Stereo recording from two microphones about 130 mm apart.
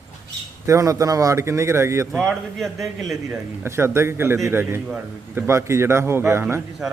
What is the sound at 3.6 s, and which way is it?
Speech, 20° right (ahead or behind).